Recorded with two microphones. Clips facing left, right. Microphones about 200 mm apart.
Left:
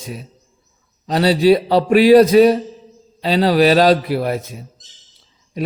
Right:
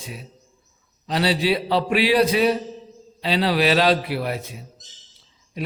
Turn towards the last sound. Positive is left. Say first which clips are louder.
# left 7 dB
turn(degrees=45)  # may be behind; listen again after turning